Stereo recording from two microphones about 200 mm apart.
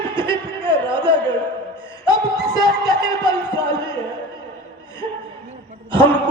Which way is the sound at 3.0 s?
20° right (ahead or behind).